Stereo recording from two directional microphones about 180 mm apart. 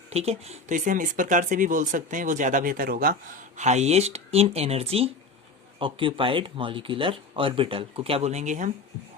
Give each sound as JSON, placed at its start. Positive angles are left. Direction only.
{"t": 0.1, "sound": "speech", "side_deg": -35}